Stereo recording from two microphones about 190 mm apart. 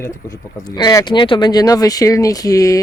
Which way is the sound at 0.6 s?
20° left (ahead or behind).